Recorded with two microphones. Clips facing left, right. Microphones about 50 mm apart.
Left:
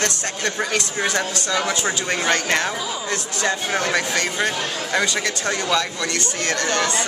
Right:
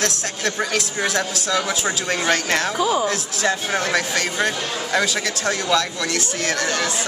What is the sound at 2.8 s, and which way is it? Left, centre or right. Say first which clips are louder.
Speech: right 9 dB; right.